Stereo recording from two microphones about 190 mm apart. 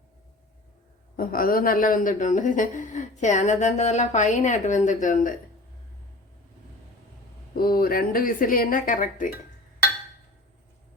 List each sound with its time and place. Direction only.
1.1 s a man's voice: 50° left (ahead or behind)
7.5 s speech: 50° left (ahead or behind)